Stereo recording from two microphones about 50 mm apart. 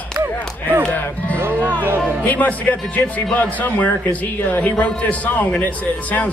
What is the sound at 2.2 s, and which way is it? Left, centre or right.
Speech, left.